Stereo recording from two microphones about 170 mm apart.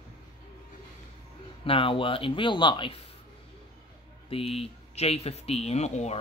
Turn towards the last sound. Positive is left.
turn(degrees=40)  # may be behind; listen again after turning